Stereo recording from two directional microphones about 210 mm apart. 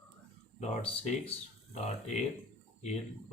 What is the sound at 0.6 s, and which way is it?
Speech, 35° left (ahead or behind).